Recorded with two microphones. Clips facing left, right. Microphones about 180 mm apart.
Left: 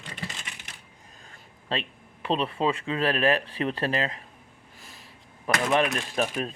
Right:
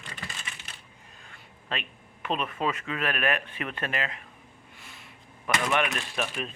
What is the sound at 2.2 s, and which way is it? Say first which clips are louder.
Speech: left 4 dB; 30° left (ahead or behind).